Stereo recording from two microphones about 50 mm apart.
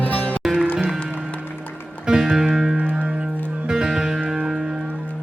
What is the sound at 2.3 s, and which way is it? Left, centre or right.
Music, centre.